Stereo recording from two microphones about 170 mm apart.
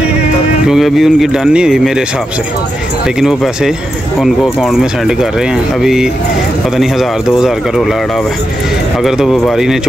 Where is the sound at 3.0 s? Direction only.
Centre (ahead or behind).